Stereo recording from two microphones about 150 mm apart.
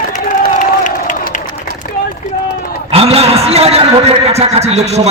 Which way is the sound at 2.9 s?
40° right (ahead or behind).